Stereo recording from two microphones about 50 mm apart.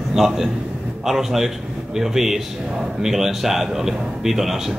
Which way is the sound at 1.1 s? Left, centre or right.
Centre.